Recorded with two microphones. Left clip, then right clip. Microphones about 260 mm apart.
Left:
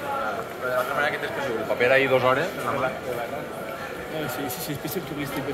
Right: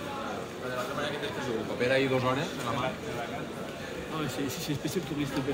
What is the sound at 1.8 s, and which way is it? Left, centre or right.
Speech, right.